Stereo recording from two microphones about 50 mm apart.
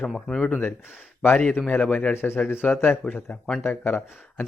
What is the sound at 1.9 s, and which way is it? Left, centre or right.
Speech, left.